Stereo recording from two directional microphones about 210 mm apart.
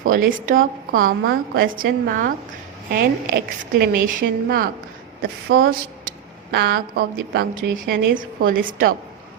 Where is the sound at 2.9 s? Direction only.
45° right (ahead or behind).